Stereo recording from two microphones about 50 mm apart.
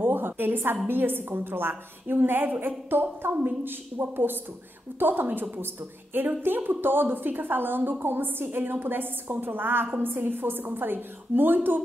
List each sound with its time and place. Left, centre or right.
0.0 s a woman's voice: right